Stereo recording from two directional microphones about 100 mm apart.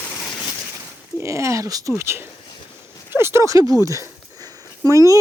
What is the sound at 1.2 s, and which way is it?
Speech, 30° right (ahead or behind).